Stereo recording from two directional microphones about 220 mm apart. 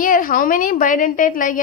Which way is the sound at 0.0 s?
35° left (ahead or behind).